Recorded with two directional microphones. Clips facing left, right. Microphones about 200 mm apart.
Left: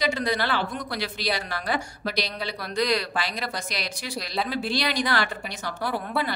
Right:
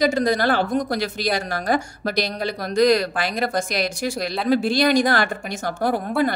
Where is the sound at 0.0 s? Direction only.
45° right (ahead or behind).